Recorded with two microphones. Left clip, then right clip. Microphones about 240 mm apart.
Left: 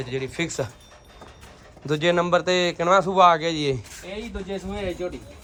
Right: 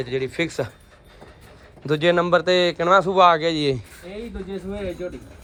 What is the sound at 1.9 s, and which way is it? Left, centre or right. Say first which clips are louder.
A man's voice: right 2 dB; left.